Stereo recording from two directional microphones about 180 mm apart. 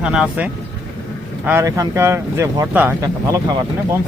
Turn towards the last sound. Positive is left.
turn(degrees=-10)  # may be behind; listen again after turning